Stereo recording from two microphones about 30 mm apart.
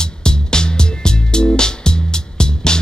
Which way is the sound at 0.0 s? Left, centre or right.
Left.